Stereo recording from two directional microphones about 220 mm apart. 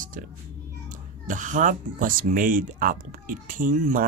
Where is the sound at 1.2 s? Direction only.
35° right (ahead or behind).